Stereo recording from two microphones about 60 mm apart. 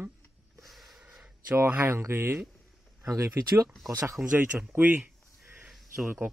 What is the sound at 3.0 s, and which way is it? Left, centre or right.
Speech, right.